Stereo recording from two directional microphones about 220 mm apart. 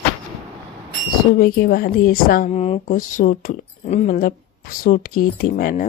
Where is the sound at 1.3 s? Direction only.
40° left (ahead or behind).